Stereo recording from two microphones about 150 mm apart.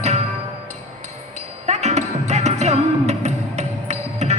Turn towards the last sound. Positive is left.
turn(degrees=-50)  # may be behind; listen again after turning